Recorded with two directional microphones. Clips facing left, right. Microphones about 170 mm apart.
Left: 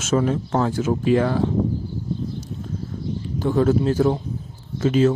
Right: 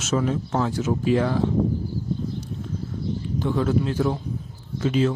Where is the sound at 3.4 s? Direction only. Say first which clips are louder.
Left 5 dB; 45° left (ahead or behind).